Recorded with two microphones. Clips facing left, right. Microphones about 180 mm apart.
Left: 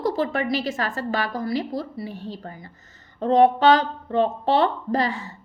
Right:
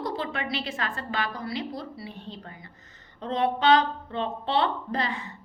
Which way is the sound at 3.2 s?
45° left (ahead or behind).